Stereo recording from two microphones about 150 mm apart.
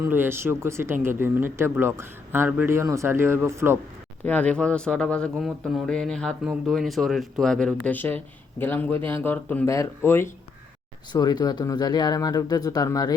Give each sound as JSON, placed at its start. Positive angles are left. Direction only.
{"t": 0.0, "sound": "speech", "side_deg": -15}
{"t": 4.2, "sound": "speech", "side_deg": 10}
{"t": 11.1, "sound": "speech", "side_deg": 25}